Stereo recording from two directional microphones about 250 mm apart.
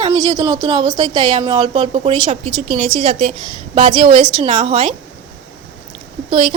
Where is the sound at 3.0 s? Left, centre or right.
Right.